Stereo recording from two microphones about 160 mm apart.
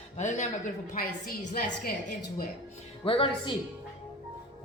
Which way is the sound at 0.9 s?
60° left (ahead or behind).